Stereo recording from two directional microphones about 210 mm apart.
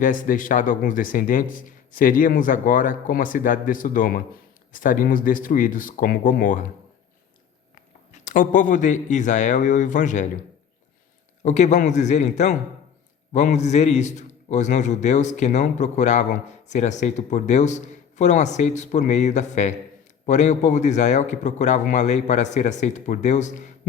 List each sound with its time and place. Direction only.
0.0 s a man's voice: 40° left (ahead or behind)
8.2 s a man's voice: 40° left (ahead or behind)
11.4 s a man's voice: 35° left (ahead or behind)